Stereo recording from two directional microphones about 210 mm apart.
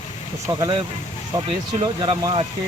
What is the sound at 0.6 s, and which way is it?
Speech, 25° right (ahead or behind).